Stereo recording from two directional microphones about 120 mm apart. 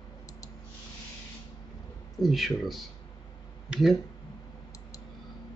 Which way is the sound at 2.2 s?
Centre (ahead or behind).